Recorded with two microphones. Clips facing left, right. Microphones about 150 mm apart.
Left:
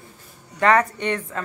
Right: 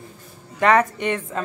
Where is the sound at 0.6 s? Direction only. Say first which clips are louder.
Right 1 dB; 20° right (ahead or behind).